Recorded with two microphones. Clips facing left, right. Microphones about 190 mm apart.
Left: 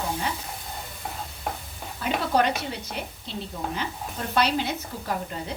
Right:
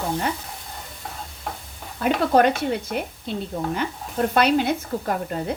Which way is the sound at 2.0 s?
55° right (ahead or behind).